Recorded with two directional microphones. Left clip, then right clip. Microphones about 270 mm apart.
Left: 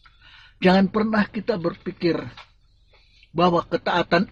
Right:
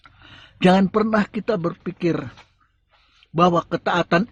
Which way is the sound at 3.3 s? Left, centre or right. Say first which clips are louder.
Right 2 dB; right.